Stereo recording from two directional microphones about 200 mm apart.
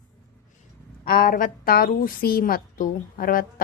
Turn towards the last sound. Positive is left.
turn(degrees=45)  # may be behind; listen again after turning